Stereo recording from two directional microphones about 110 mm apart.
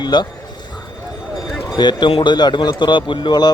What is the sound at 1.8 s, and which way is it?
A man's voice, 45° left (ahead or behind).